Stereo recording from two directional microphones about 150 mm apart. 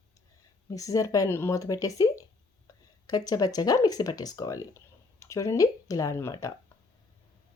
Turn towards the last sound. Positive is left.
turn(degrees=20)  # may be behind; listen again after turning